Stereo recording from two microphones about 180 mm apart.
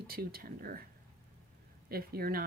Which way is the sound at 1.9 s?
60° right (ahead or behind).